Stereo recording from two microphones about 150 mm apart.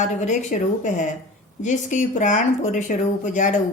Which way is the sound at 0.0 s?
55° left (ahead or behind).